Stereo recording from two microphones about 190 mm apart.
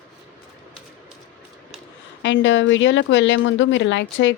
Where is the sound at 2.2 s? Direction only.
75° left (ahead or behind).